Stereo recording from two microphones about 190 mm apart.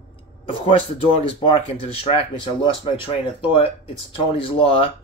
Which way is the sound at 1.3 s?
30° left (ahead or behind).